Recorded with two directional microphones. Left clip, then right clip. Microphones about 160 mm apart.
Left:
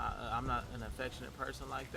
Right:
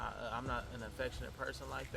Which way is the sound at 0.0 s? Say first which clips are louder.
Left 3 dB; 25° left (ahead or behind).